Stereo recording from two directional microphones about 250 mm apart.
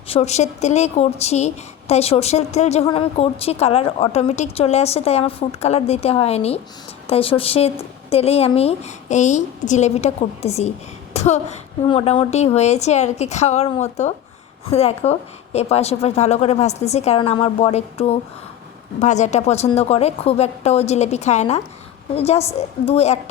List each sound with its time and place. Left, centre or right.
0.1 s a woman's voice: left
11.1 s a sound: left
11.9 s a woman's voice: left